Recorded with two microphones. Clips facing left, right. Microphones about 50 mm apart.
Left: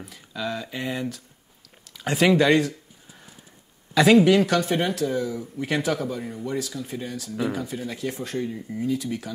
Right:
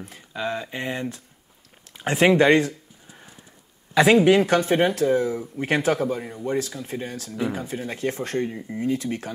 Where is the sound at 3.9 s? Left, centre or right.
Centre; by 9.2 s right.